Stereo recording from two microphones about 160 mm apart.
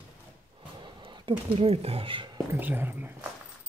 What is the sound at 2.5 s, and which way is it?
Speech, 10° right (ahead or behind).